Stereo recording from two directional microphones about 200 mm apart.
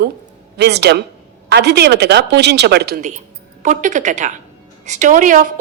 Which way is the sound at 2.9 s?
40° right (ahead or behind).